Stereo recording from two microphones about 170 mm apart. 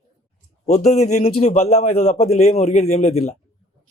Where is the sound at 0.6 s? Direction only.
40° left (ahead or behind).